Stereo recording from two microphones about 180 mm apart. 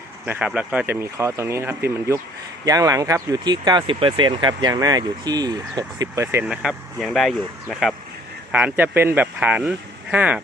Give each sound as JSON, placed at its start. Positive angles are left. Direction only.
{"t": 0.3, "sound": "speech", "side_deg": -5}
{"t": 6.5, "sound": "speech", "side_deg": -5}